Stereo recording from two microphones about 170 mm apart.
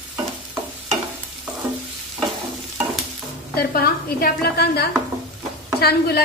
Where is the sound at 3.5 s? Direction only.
60° left (ahead or behind).